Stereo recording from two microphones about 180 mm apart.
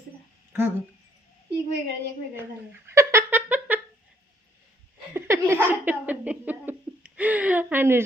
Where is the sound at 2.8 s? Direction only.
15° right (ahead or behind).